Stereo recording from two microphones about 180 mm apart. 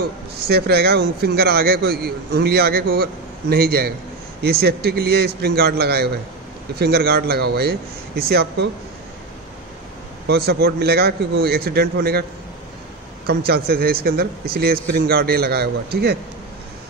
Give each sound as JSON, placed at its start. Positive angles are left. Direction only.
{"t": 0.0, "sound": "a man's voice", "side_deg": -60}
{"t": 10.2, "sound": "a man's voice", "side_deg": -60}
{"t": 13.3, "sound": "a man's voice", "side_deg": -60}